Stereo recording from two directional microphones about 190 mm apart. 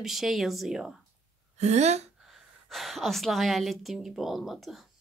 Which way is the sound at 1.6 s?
35° right (ahead or behind).